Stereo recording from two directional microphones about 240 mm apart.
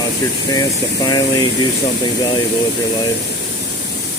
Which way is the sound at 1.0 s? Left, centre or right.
Centre.